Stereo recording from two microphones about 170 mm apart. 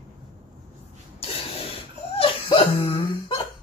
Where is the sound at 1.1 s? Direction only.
35° left (ahead or behind).